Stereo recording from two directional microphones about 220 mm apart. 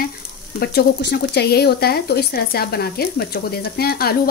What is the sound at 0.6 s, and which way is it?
Speech, 45° left (ahead or behind).